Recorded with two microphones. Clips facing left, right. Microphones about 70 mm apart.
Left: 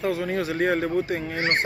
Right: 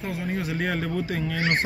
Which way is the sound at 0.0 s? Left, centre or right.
Left.